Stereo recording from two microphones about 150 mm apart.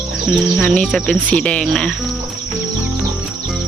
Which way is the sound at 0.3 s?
5° left (ahead or behind).